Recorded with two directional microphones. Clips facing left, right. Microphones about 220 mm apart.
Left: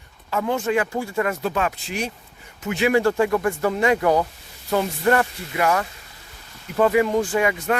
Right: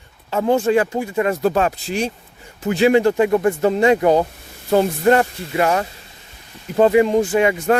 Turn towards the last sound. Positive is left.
turn(degrees=-25)  # may be behind; listen again after turning